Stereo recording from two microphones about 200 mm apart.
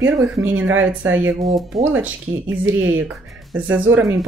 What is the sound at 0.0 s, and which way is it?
Speech, 10° right (ahead or behind).